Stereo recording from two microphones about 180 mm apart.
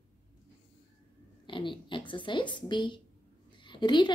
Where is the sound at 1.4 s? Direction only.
25° left (ahead or behind).